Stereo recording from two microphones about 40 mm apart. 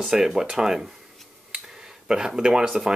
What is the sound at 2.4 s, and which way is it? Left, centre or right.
Speech, centre.